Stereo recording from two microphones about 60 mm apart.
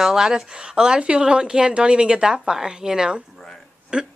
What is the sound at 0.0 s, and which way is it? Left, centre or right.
Speech, centre.